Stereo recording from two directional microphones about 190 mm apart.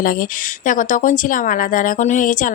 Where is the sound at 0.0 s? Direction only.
45° left (ahead or behind).